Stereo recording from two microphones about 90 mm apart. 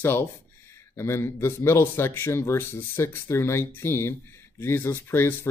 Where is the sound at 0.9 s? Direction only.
25° left (ahead or behind).